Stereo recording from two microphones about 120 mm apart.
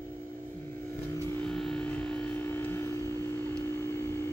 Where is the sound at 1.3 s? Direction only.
10° left (ahead or behind).